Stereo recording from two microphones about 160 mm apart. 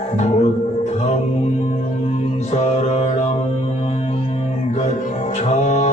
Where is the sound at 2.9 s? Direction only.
45° left (ahead or behind).